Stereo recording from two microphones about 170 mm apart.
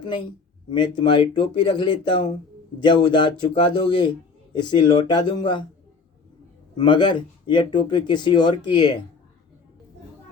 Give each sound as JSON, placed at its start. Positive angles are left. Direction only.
{"t": 0.7, "sound": "speech", "side_deg": 30}
{"t": 6.7, "sound": "speech", "side_deg": 25}